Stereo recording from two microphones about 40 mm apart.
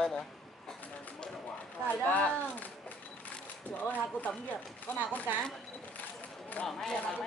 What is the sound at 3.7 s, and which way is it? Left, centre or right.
Speech, left.